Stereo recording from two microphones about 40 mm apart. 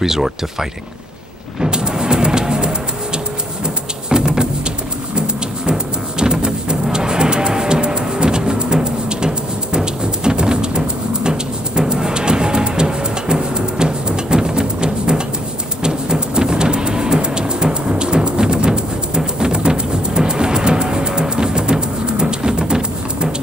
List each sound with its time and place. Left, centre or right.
0.0 s speech: centre
1.6 s music: centre
3.6 s a sound: centre
5.1 s music: right